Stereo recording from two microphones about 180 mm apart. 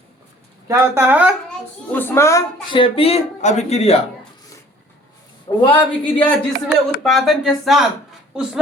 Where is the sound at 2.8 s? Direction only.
35° left (ahead or behind).